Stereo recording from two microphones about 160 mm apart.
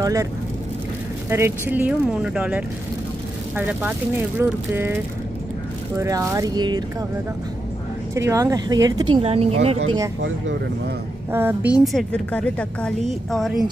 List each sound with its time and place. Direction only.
0.0 s speech: 20° right (ahead or behind)
1.3 s speech: 15° right (ahead or behind)
5.9 s speech: 20° right (ahead or behind)
8.1 s speech: 20° right (ahead or behind); by 9.8 s 40° right (ahead or behind)
11.3 s speech: 15° right (ahead or behind)
11.8 s a woman's voice: centre (ahead or behind)